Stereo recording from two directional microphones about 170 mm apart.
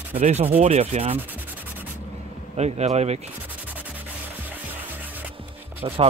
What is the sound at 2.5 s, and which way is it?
Speech, 40° right (ahead or behind).